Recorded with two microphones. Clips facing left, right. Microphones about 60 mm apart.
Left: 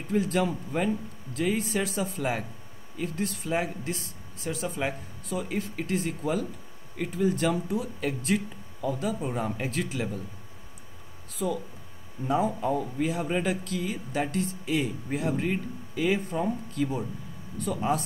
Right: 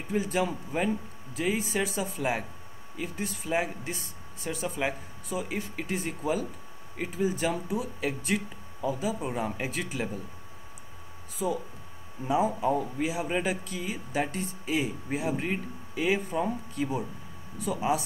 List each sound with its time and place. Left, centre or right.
0.1 s speech: centre
12.3 s speech: centre
12.6 s speech: right
13.0 s speech: centre